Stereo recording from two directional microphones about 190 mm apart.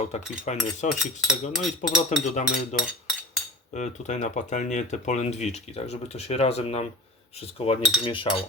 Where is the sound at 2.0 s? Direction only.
40° left (ahead or behind).